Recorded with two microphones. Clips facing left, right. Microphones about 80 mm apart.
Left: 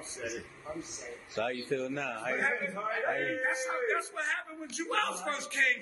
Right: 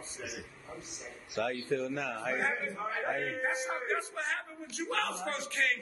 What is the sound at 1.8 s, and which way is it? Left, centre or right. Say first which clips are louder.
A man's voice: even; centre.